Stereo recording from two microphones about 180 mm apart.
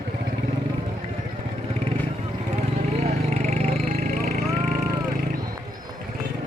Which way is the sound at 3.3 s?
40° right (ahead or behind).